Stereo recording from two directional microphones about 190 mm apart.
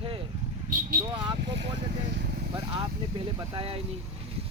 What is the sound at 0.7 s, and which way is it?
Vehicle, 45° right (ahead or behind).